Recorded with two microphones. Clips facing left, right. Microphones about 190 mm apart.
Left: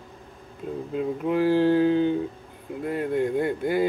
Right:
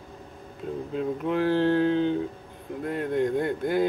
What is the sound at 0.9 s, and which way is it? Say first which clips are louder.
A man's voice: left 2 dB; centre (ahead or behind).